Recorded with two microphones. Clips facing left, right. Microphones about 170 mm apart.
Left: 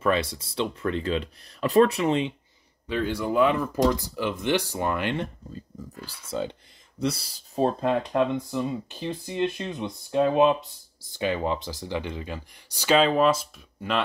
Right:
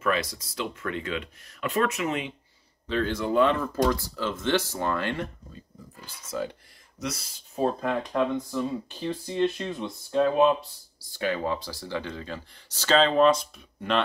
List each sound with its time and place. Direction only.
0.0 s speech: 30° left (ahead or behind)
2.9 s speech: 10° left (ahead or behind); by 7.7 s 35° left (ahead or behind)
7.8 s speech: 20° left (ahead or behind); by 14.0 s 5° left (ahead or behind)